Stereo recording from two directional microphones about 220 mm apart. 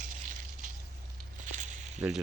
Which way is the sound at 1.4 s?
35° right (ahead or behind).